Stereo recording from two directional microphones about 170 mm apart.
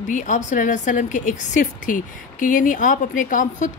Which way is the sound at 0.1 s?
45° left (ahead or behind).